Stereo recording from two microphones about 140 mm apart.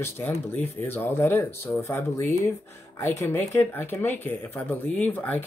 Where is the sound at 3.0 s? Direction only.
15° left (ahead or behind).